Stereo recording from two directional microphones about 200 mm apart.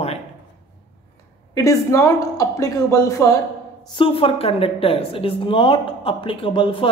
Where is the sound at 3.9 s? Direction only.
25° left (ahead or behind).